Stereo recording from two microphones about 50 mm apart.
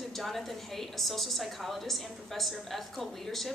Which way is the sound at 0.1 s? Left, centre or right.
Centre.